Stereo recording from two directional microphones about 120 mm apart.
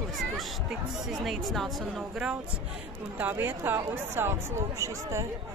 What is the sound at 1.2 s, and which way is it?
Speech, centre (ahead or behind).